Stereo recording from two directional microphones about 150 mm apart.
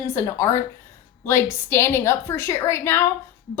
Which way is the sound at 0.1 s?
20° left (ahead or behind).